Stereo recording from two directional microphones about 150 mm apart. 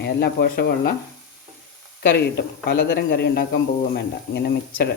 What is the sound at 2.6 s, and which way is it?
Speech, 90° left.